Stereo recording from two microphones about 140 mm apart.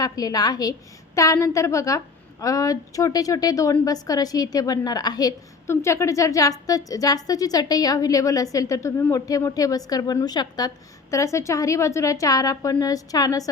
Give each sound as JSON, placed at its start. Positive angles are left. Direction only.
{"t": 0.0, "sound": "a woman's voice", "side_deg": 25}